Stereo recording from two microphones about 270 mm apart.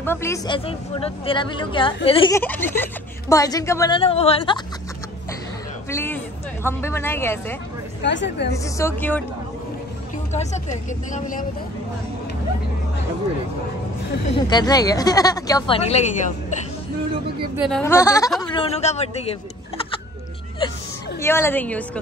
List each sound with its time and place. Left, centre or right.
0.0 s a woman's voice: centre
5.9 s a woman's voice: centre
8.0 s a woman's voice: left
8.5 s a woman's voice: centre
10.3 s speech: left
14.3 s a woman's voice: centre
17.6 s a woman's voice: centre; by 19.3 s left
21.2 s a woman's voice: centre